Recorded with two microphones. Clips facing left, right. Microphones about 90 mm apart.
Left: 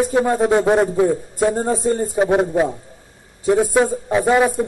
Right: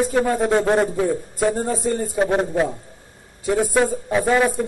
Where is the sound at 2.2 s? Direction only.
10° left (ahead or behind).